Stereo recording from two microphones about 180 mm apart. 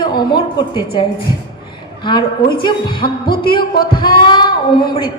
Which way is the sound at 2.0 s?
25° left (ahead or behind).